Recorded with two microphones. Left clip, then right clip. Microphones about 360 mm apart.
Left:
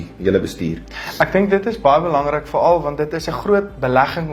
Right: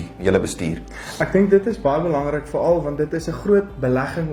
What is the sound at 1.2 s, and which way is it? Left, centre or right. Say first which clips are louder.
Speech: left 1 dB; left.